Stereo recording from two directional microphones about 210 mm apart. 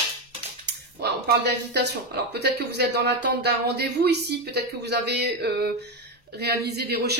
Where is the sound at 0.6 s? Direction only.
55° right (ahead or behind).